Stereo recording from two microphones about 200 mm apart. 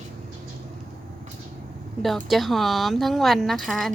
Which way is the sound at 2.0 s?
Centre (ahead or behind).